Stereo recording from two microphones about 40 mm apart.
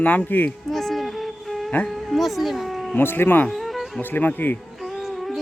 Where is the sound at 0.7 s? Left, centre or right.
Centre.